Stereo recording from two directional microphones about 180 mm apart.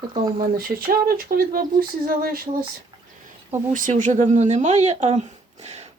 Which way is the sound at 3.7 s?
45° right (ahead or behind).